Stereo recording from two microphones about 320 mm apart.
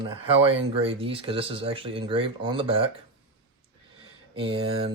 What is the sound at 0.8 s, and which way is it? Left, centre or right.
Speech, centre.